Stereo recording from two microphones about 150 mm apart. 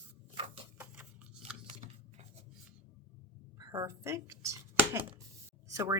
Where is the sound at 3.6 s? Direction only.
25° right (ahead or behind).